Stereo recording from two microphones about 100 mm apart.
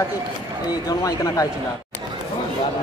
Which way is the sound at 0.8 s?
35° left (ahead or behind).